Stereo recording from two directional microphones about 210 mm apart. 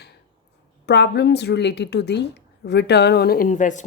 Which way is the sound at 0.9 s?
55° left (ahead or behind).